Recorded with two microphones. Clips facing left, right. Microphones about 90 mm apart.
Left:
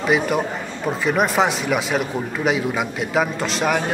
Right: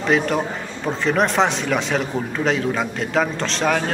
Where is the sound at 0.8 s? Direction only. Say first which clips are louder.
Even; 5° left (ahead or behind).